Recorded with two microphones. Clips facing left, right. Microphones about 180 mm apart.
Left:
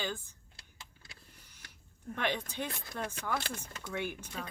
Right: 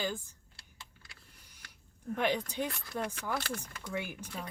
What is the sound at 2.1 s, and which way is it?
Speech, 10° right (ahead or behind).